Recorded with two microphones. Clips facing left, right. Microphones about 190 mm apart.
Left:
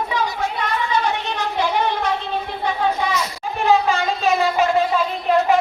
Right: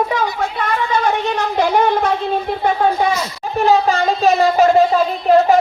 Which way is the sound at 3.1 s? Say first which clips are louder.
Right 4 dB; 35° right (ahead or behind).